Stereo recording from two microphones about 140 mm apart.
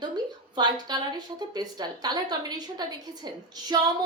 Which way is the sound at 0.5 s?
30° right (ahead or behind).